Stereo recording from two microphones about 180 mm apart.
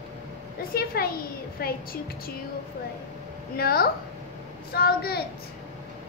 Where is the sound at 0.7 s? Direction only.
55° left (ahead or behind).